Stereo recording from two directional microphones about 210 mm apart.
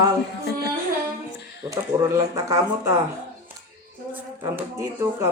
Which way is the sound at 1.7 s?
15° right (ahead or behind).